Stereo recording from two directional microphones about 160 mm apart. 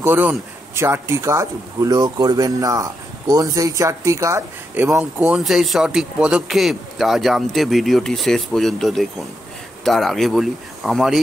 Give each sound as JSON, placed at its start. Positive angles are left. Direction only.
{"t": 0.0, "sound": "speech", "side_deg": -10}
{"t": 5.2, "sound": "speech", "side_deg": 0}